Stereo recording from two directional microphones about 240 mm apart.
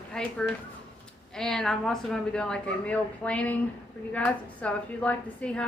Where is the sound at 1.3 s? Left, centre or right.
Centre.